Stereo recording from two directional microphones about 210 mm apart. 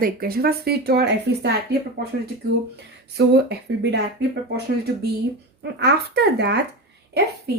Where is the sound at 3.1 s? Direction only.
55° right (ahead or behind).